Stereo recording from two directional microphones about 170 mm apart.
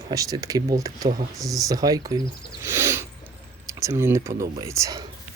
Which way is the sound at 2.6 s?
15° right (ahead or behind).